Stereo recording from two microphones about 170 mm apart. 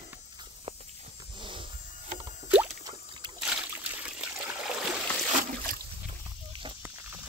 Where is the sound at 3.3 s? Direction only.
5° right (ahead or behind).